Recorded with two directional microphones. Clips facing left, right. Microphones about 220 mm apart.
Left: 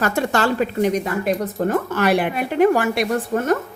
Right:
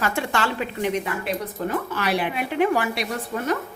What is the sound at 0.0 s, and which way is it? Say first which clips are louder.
A woman's voice: left 5 dB; 40° left (ahead or behind).